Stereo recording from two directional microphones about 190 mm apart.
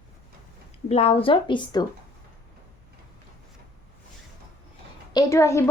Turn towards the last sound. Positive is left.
turn(degrees=15)  # may be behind; listen again after turning